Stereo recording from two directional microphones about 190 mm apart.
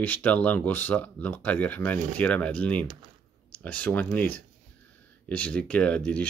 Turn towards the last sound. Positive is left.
turn(degrees=5)  # may be behind; listen again after turning